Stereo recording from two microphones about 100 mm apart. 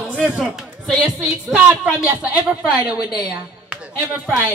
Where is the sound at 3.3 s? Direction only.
10° right (ahead or behind).